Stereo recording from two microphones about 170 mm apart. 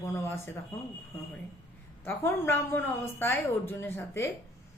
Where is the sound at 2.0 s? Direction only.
15° left (ahead or behind).